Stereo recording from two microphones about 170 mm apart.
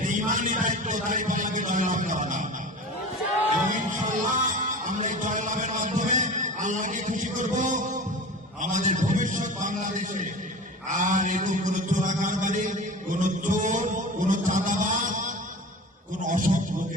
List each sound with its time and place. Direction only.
0.0 s a man's voice: 50° right (ahead or behind)
3.7 s music: 50° right (ahead or behind)
8.6 s a sound: 45° right (ahead or behind)